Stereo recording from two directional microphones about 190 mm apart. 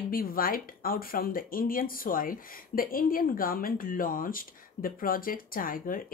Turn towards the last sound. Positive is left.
turn(degrees=45)  # may be behind; listen again after turning